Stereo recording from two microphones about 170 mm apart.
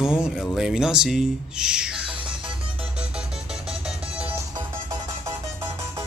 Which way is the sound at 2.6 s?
5° right (ahead or behind).